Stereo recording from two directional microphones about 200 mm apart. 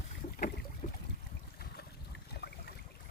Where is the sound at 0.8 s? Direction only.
45° left (ahead or behind).